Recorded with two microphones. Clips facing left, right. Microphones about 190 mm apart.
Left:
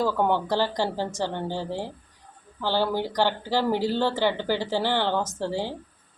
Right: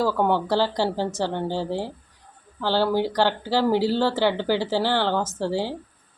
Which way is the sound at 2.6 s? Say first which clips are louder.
Right 3 dB; 15° left (ahead or behind).